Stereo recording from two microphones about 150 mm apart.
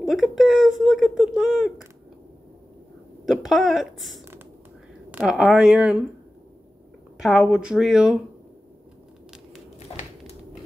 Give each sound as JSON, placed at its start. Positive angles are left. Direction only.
{"t": 0.0, "sound": "speech", "side_deg": 0}
{"t": 3.3, "sound": "speech", "side_deg": 0}
{"t": 7.2, "sound": "speech", "side_deg": 0}
{"t": 9.8, "sound": "a sound", "side_deg": 45}